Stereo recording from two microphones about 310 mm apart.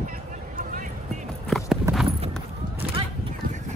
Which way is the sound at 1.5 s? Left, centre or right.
Centre.